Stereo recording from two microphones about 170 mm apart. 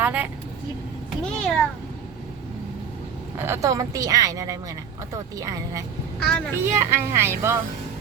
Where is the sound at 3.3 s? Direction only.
15° right (ahead or behind).